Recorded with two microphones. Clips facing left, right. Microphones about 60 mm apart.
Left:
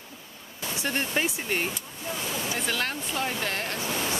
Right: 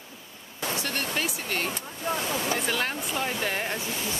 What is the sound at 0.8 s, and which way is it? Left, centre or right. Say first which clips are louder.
Speech: left 5 dB; left.